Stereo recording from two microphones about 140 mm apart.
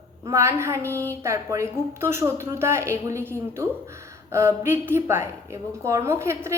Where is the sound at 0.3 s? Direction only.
20° right (ahead or behind).